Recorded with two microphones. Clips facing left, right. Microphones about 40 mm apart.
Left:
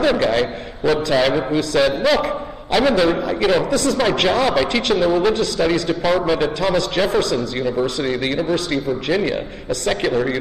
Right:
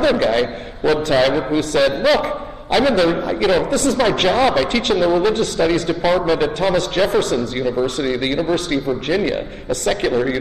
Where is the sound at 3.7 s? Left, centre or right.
Right.